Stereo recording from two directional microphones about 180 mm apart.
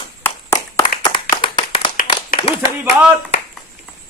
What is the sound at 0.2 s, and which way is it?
Clapping, 15° left (ahead or behind).